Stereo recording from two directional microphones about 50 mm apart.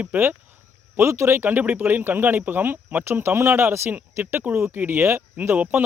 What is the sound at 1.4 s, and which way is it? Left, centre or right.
Speech, right.